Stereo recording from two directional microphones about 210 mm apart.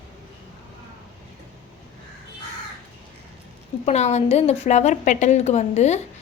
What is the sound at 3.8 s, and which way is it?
A woman's voice, 30° left (ahead or behind).